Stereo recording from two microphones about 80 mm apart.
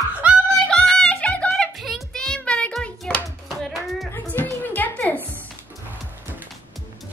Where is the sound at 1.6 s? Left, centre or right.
Centre.